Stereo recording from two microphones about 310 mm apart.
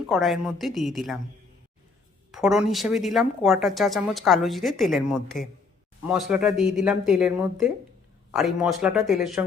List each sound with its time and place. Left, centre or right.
0.0 s speech: centre
2.3 s speech: centre